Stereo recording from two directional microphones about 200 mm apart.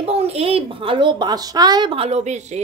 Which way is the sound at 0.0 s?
30° right (ahead or behind).